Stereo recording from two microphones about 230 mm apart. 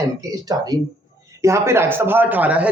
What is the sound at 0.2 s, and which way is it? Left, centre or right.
Speech, centre.